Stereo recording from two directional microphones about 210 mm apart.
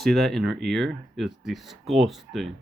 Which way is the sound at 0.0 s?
Centre (ahead or behind).